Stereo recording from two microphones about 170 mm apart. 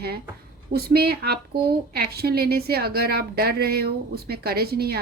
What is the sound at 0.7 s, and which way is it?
A woman's voice, 65° right (ahead or behind).